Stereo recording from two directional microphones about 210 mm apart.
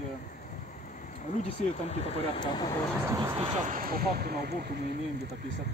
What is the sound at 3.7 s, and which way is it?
Speech, 45° right (ahead or behind).